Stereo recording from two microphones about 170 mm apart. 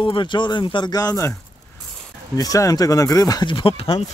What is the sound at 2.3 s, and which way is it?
Speech, 20° left (ahead or behind).